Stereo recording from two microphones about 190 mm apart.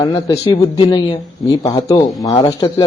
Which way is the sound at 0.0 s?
20° left (ahead or behind).